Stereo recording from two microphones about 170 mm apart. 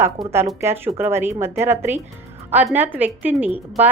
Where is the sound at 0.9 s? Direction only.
15° right (ahead or behind).